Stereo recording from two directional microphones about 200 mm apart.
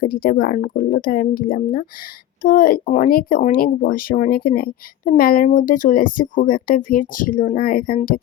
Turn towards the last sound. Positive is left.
turn(degrees=45)  # may be behind; listen again after turning